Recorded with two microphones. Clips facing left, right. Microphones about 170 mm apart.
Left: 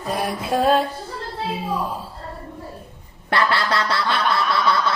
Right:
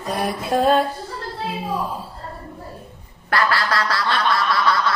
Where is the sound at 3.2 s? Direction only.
25° left (ahead or behind).